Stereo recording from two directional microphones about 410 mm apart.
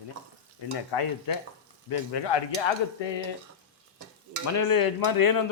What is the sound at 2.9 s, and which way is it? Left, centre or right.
Speech, left.